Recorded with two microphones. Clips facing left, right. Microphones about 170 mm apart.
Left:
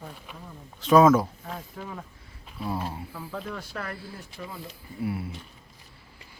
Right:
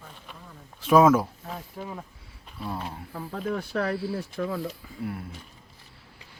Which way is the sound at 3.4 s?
55° right (ahead or behind).